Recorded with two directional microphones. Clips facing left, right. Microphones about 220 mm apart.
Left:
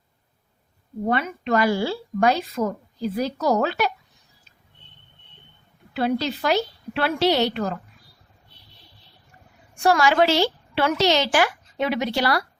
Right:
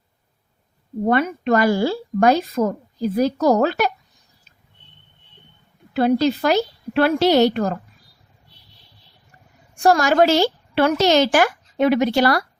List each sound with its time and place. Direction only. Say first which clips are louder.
1.0 s a woman's voice: right 6 dB; 45° right (ahead or behind)
5.9 s a woman's voice: right 6 dB; 45° right (ahead or behind)
9.8 s a woman's voice: right 3 dB; 45° right (ahead or behind)